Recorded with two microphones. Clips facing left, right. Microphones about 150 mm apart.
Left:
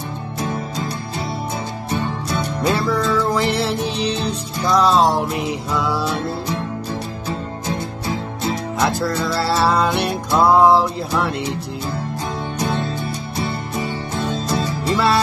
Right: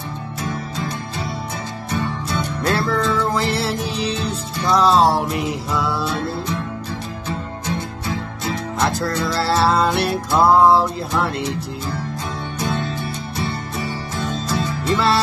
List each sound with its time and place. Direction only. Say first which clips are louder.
2.6 s music: left 1 dB; centre (ahead or behind)
6.1 s music: left 1 dB; 35° left (ahead or behind)
8.8 s music: left 1 dB; centre (ahead or behind)
13.4 s music: left 2 dB; 30° left (ahead or behind)